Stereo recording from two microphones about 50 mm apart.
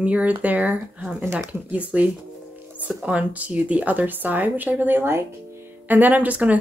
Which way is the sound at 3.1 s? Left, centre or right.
Right.